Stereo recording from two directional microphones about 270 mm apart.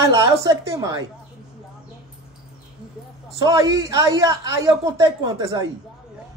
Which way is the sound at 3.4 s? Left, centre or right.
Centre.